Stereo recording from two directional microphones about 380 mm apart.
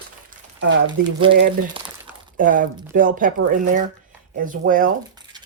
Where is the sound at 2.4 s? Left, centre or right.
Right.